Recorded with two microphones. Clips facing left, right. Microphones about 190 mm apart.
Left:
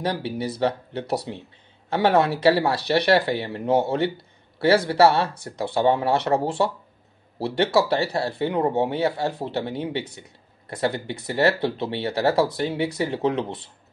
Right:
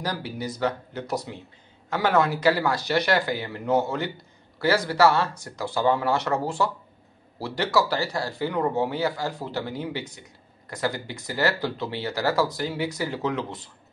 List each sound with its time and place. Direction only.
0.0 s speech: 25° left (ahead or behind)